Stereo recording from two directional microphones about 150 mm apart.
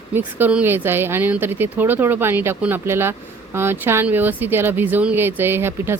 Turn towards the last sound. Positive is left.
turn(degrees=-15)  # may be behind; listen again after turning